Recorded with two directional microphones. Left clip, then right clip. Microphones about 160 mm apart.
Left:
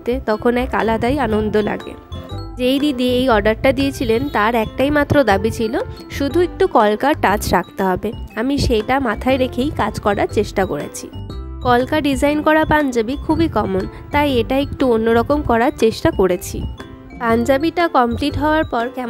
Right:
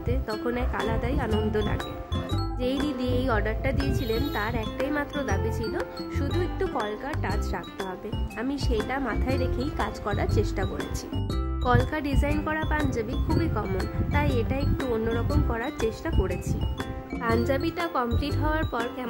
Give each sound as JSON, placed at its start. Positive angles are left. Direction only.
{"t": 0.0, "sound": "speech", "side_deg": 55}
{"t": 2.9, "sound": "speech", "side_deg": 50}
{"t": 17.5, "sound": "speech", "side_deg": 50}